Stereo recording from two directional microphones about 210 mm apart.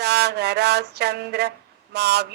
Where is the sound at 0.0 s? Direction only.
50° right (ahead or behind).